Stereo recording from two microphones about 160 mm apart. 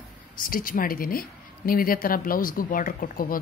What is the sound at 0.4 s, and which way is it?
Speech, 60° left (ahead or behind).